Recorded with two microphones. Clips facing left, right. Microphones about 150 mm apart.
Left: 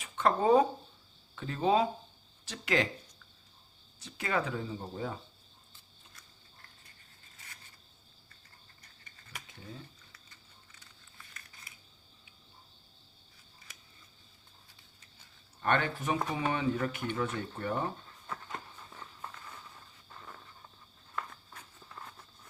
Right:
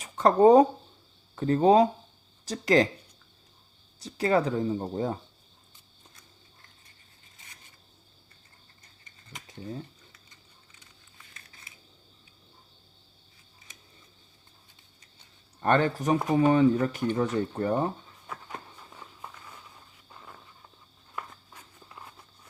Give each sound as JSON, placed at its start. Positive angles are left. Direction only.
{"t": 0.0, "sound": "speech", "side_deg": -40}
{"t": 4.0, "sound": "speech", "side_deg": -35}
{"t": 15.6, "sound": "speech", "side_deg": -40}
{"t": 18.3, "sound": "walk", "side_deg": -10}
{"t": 21.2, "sound": "a sound", "side_deg": -10}